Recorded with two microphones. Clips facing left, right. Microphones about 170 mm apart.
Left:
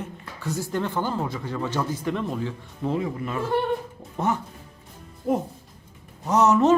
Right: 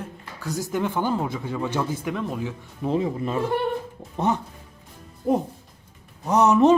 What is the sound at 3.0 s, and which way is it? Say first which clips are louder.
Speech: right 3 dB; 25° right (ahead or behind).